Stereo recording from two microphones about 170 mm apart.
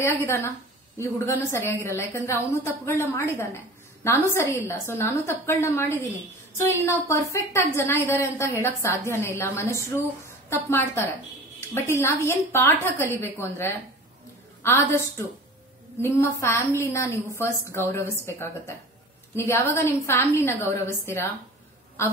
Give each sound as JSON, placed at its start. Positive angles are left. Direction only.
{"t": 0.9, "sound": "a woman's voice", "side_deg": 15}